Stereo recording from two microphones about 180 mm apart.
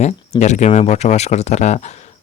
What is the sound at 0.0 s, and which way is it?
Speech, 40° left (ahead or behind).